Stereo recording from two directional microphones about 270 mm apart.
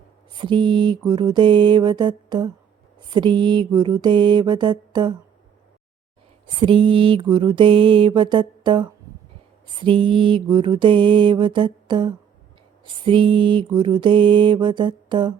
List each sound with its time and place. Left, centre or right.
0.3 s mantra: centre
6.6 s mantra: centre